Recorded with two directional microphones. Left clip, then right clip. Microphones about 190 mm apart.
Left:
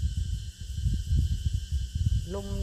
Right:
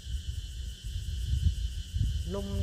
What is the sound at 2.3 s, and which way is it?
Speech, 60° left (ahead or behind).